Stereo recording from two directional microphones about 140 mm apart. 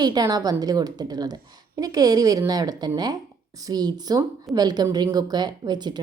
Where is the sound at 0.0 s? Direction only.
30° right (ahead or behind).